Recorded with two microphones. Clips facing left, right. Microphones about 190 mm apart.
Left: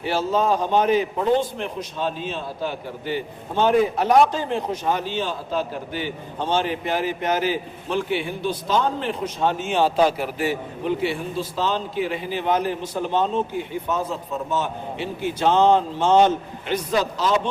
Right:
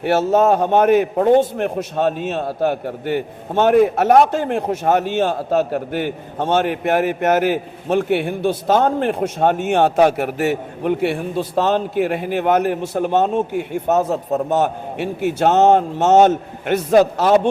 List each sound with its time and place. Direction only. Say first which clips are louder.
0.0 s a man's voice: right 7 dB; 65° right (ahead or behind)